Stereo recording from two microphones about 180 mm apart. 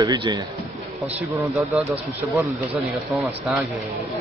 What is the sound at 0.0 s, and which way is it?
Speech, 25° right (ahead or behind).